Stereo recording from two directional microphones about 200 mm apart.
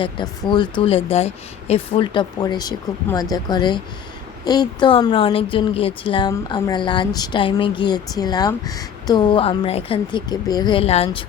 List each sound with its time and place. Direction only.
0.0 s speech: 25° left (ahead or behind)